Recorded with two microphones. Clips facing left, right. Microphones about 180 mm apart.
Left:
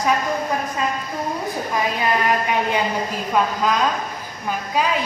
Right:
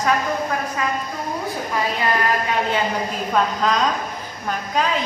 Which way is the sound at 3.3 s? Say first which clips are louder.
Even; 5° left (ahead or behind).